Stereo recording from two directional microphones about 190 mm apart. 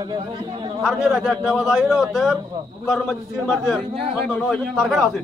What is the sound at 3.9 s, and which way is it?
Speech, 30° right (ahead or behind).